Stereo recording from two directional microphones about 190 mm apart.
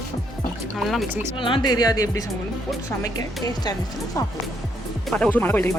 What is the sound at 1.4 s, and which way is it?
Speech, 25° left (ahead or behind).